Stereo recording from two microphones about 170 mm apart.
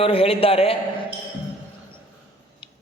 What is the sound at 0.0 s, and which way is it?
Speech, 35° left (ahead or behind).